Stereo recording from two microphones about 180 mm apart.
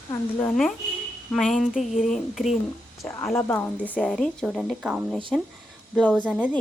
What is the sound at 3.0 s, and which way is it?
A woman's voice, 15° left (ahead or behind).